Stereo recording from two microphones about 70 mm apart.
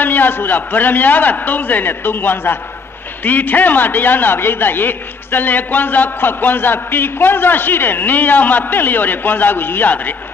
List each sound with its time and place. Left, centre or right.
0.0 s a man's voice: left